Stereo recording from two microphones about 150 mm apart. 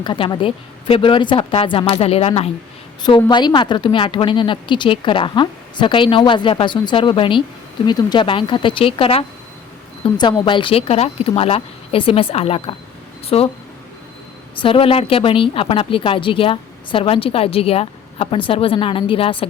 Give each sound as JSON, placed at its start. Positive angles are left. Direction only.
{"t": 0.0, "sound": "speech", "side_deg": 30}
{"t": 3.0, "sound": "speech", "side_deg": 30}
{"t": 14.5, "sound": "speech", "side_deg": 35}